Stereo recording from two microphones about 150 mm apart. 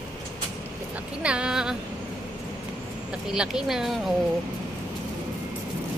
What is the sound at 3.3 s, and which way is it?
Speech, 5° right (ahead or behind).